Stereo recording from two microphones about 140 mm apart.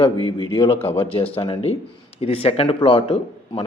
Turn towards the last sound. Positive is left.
turn(degrees=40)  # may be behind; listen again after turning